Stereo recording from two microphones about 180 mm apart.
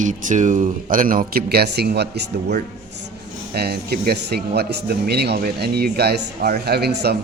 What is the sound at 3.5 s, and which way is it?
Speech, 60° right (ahead or behind).